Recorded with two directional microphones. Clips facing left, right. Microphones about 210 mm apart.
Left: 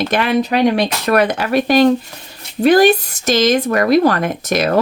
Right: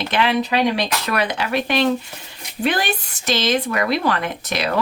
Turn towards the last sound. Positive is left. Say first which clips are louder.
# left 7 dB
turn(degrees=45)  # may be behind; listen again after turning